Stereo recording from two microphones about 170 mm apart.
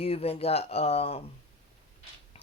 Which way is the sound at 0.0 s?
35° left (ahead or behind).